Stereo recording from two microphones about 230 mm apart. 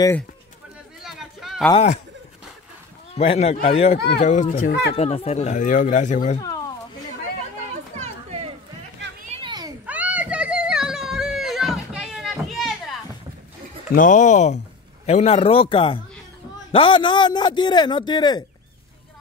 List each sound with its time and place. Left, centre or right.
1.0 s a sound: centre
1.7 s a man's voice: left
3.2 s a man's voice: left
4.9 s speech: left
9.2 s children playing: right
9.8 s a sound: centre
13.9 s a man's voice: left; by 18.4 s centre